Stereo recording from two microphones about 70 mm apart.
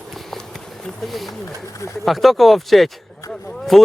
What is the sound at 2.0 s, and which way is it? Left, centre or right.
Speech, centre.